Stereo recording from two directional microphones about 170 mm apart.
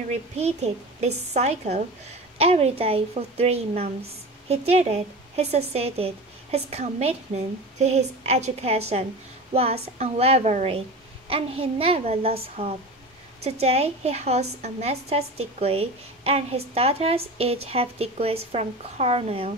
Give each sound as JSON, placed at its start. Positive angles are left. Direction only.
{"t": 0.4, "sound": "a woman's voice", "side_deg": -40}